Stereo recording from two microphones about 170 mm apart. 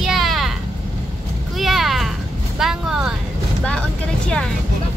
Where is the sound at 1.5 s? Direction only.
Centre (ahead or behind).